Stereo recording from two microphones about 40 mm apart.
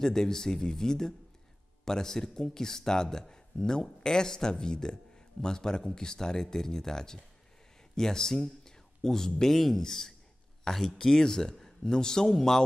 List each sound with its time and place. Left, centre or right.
0.0 s a man's voice: centre
10.6 s a sound: centre
11.0 s a man's voice: centre